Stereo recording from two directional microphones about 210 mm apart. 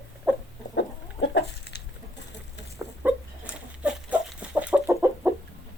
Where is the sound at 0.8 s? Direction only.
55° left (ahead or behind).